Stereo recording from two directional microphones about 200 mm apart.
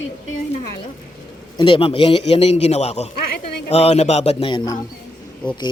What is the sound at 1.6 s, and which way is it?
Speech, 25° left (ahead or behind).